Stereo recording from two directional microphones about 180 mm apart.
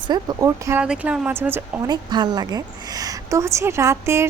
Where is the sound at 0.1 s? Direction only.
20° right (ahead or behind).